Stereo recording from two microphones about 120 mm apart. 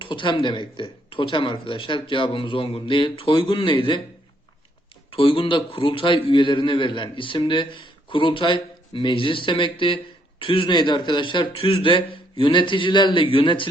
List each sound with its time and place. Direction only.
0.0 s a man's voice: 45° left (ahead or behind)
5.1 s a man's voice: 45° left (ahead or behind)